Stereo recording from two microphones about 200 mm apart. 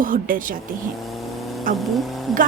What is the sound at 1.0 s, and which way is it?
Vehicle, centre (ahead or behind).